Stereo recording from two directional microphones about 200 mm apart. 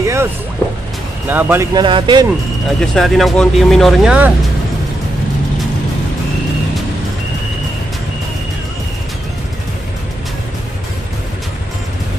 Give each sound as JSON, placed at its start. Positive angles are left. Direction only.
{"t": 0.0, "sound": "music", "side_deg": -15}
{"t": 1.3, "sound": "speech", "side_deg": -10}
{"t": 2.8, "sound": "speech", "side_deg": 0}